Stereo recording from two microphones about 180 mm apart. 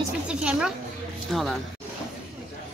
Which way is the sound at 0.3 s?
5° right (ahead or behind).